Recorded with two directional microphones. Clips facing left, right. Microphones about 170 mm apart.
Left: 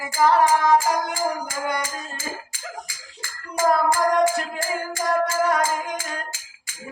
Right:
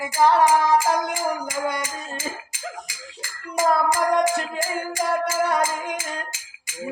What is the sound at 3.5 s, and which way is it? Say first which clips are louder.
Music: left 1 dB; 20° right (ahead or behind).